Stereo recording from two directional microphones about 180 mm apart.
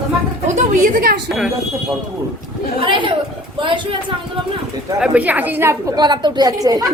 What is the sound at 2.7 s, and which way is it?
Speech, 30° right (ahead or behind).